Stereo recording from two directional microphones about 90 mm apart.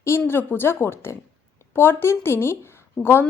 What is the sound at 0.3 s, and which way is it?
A woman's voice, 25° left (ahead or behind).